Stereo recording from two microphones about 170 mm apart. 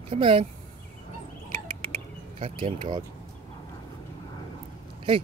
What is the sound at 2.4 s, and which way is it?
Speech, 35° right (ahead or behind).